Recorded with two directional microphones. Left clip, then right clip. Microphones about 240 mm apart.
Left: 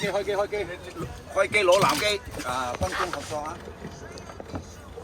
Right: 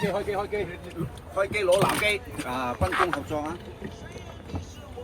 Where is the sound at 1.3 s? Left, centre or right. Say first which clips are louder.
Left 4 dB; left.